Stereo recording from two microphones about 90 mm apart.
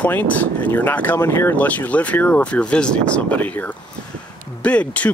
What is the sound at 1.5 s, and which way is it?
Speech, 15° left (ahead or behind).